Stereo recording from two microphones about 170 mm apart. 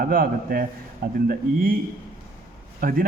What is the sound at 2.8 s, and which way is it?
Speech, 55° right (ahead or behind).